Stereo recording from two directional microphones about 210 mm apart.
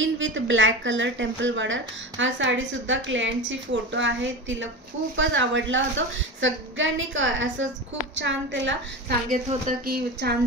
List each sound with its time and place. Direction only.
0.0 s a woman's voice: 65° right (ahead or behind)
9.3 s speech: 35° right (ahead or behind)
9.8 s a woman's voice: 45° right (ahead or behind)